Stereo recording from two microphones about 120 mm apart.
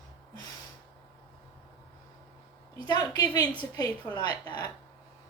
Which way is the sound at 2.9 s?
35° left (ahead or behind).